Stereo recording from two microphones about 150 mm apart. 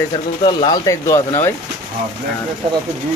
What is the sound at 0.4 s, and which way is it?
Speech, 35° left (ahead or behind).